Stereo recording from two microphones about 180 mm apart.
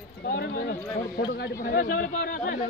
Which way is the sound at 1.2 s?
55° left (ahead or behind).